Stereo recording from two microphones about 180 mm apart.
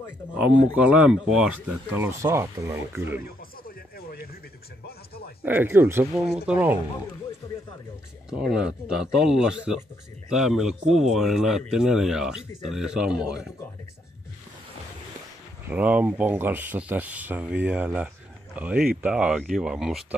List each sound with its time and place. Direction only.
0.4 s speech: 5° right (ahead or behind)
3.6 s a sound: 60° left (ahead or behind)
5.4 s speech: 10° right (ahead or behind)
8.3 s speech: 5° right (ahead or behind)
15.7 s speech: 10° right (ahead or behind)